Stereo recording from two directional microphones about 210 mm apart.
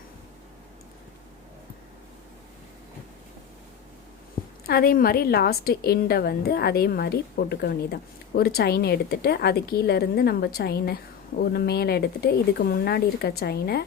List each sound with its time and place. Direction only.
4.6 s a woman's voice: 45° left (ahead or behind)